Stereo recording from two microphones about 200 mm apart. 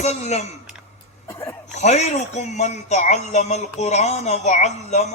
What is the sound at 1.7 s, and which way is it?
A man's voice, 35° left (ahead or behind).